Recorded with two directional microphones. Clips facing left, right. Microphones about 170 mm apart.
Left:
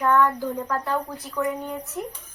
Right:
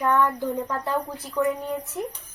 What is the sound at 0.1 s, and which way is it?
Speech, 20° right (ahead or behind).